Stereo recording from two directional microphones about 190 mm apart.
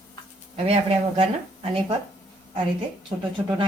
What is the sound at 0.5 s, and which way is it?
Speech, 30° right (ahead or behind).